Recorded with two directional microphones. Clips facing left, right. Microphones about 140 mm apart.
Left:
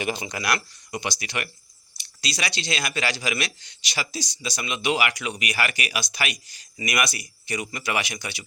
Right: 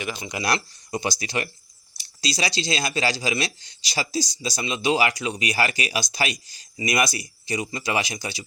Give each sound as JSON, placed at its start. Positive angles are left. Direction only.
{"t": 0.0, "sound": "speech", "side_deg": 20}
{"t": 0.4, "sound": "speech", "side_deg": -30}